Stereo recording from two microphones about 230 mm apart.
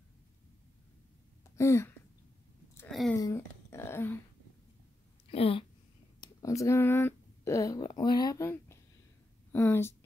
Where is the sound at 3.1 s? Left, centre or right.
Centre.